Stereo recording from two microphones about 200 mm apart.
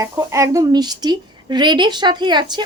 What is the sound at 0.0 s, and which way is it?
A woman's voice, 15° right (ahead or behind).